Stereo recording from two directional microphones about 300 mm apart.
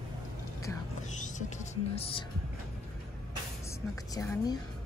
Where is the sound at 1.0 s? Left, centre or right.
Left.